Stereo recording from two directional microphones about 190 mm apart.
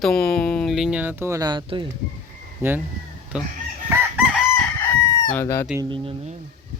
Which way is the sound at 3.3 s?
5° right (ahead or behind).